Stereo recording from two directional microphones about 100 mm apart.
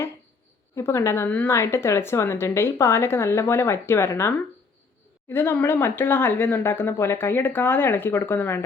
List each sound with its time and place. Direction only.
0.8 s speech: 25° left (ahead or behind)